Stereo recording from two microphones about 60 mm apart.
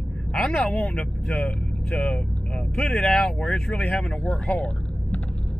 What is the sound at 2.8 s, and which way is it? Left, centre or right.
Speech, centre.